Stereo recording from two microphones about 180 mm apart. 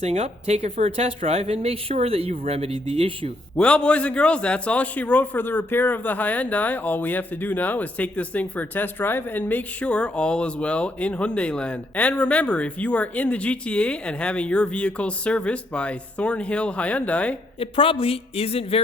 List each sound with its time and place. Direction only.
0.0 s speech: 35° right (ahead or behind)
3.6 s a man's voice: 5° left (ahead or behind)
17.6 s a woman's voice: 30° left (ahead or behind)